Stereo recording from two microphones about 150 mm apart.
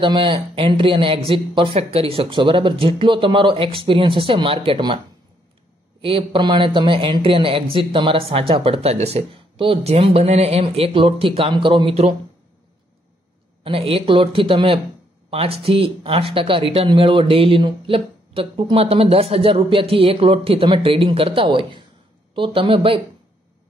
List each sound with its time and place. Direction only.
0.0 s speech: 35° right (ahead or behind)
5.9 s speech: 35° right (ahead or behind)
13.7 s speech: 40° right (ahead or behind)